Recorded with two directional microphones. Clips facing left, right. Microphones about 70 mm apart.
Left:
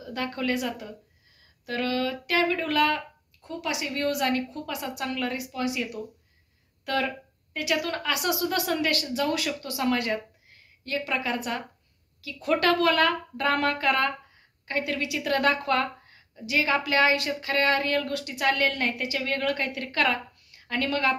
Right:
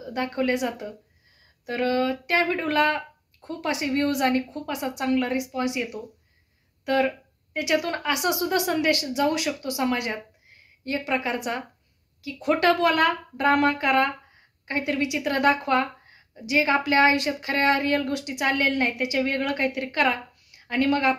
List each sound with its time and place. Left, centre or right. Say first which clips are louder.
0.0 s a woman's voice: right 4 dB; right
6.8 s a sound: right 5 dB; right
7.5 s a woman's voice: right 3 dB; right